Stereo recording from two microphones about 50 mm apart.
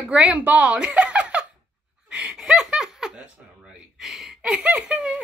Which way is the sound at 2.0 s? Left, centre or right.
Right.